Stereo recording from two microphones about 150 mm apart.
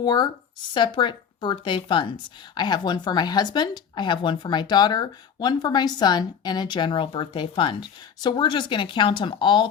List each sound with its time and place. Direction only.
0.0 s a woman's voice: 25° left (ahead or behind)